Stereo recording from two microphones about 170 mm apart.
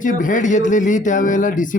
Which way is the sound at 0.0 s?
50° left (ahead or behind).